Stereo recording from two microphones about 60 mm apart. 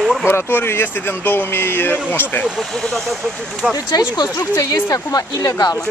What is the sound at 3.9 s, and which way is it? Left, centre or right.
Speech, left.